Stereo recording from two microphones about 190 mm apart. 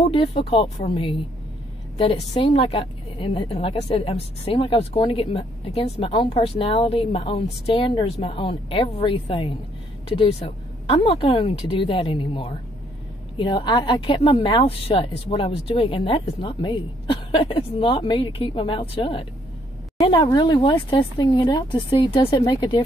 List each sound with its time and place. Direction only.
0.0 s a woman's voice: 30° left (ahead or behind)